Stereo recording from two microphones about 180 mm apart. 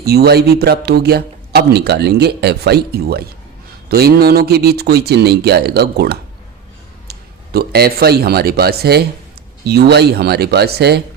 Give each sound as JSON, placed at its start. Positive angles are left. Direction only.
{"t": 0.0, "sound": "a man's voice", "side_deg": -60}